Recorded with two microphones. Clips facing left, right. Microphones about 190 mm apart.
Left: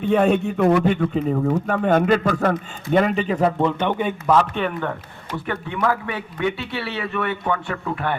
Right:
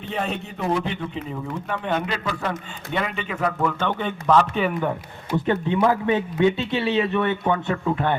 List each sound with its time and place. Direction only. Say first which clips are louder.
0.0 s a man's voice: left 11 dB; 50° left (ahead or behind); by 5.4 s 10° right (ahead or behind)
5.5 s speech: right 3 dB; 20° right (ahead or behind)